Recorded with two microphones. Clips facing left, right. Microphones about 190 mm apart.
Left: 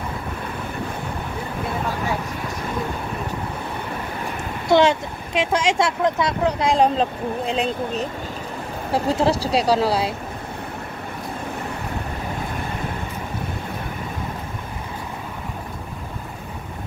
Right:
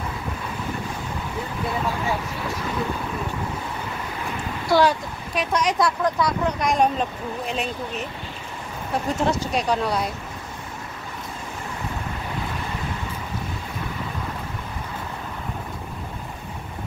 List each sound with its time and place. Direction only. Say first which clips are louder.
4.6 s speech: left 3 dB; 20° left (ahead or behind)
8.9 s speech: left 4 dB; 30° left (ahead or behind)